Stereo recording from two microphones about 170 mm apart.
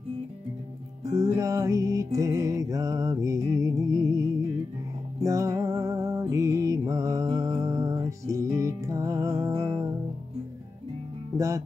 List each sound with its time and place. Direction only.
1.2 s music: 20° right (ahead or behind)
11.3 s speech: 20° right (ahead or behind)